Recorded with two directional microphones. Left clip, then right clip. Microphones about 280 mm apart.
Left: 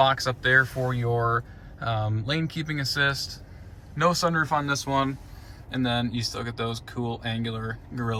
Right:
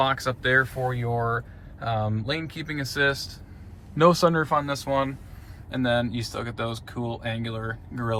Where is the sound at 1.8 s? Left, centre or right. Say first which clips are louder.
Right 2 dB; centre.